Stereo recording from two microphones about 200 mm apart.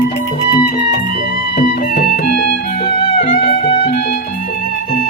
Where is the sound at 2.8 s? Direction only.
25° left (ahead or behind).